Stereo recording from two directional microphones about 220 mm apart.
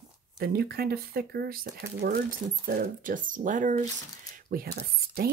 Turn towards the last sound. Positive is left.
turn(degrees=-40)  # may be behind; listen again after turning